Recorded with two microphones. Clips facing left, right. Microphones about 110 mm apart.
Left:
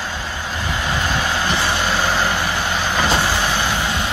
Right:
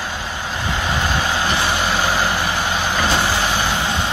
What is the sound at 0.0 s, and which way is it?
Vehicle, 15° right (ahead or behind).